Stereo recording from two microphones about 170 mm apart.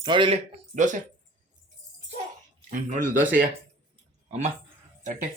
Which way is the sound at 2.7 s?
55° right (ahead or behind).